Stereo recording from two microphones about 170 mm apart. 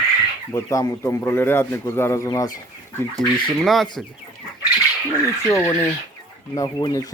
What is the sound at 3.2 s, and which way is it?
Speech, centre (ahead or behind).